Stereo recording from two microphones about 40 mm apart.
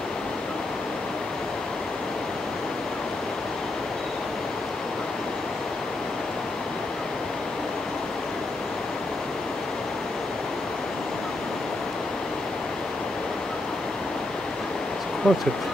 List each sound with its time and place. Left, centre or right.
15.2 s speech: centre